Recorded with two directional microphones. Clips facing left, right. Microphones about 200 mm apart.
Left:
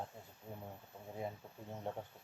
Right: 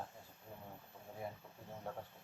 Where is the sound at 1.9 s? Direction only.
25° left (ahead or behind).